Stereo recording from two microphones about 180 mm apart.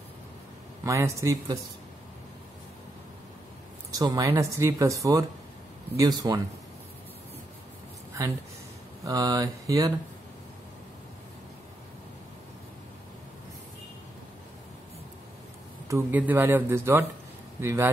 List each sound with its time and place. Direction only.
0.8 s speech: 15° right (ahead or behind)
3.9 s speech: 20° right (ahead or behind)
9.0 s speech: 20° right (ahead or behind)
15.9 s speech: 10° right (ahead or behind)